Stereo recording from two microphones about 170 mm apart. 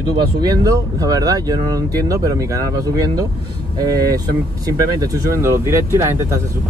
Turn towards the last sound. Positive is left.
turn(degrees=-15)  # may be behind; listen again after turning